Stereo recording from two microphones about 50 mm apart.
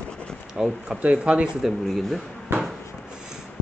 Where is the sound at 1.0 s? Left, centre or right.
Right.